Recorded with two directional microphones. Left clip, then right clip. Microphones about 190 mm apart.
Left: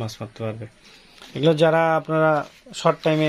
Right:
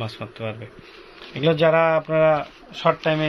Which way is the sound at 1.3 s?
50° left (ahead or behind).